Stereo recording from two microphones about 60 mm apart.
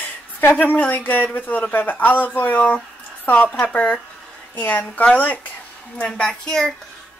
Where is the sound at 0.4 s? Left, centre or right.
Left.